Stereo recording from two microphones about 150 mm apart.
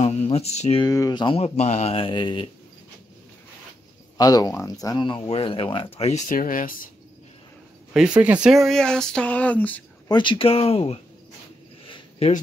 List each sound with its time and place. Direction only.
0.0 s speech: 45° left (ahead or behind)
0.8 s speech: 25° left (ahead or behind)
4.2 s speech: 25° left (ahead or behind); by 6.9 s 65° left (ahead or behind)
8.2 s speech: 10° right (ahead or behind); by 9.8 s 10° left (ahead or behind)
10.0 s speech: 30° left (ahead or behind)